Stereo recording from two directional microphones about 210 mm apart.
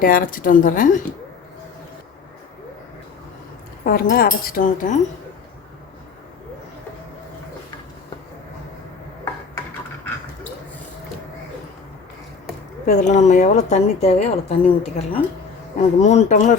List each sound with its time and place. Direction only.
0.0 s a woman's voice: 40° left (ahead or behind)
3.8 s speech: 50° left (ahead or behind)
12.8 s a woman's voice: 35° left (ahead or behind)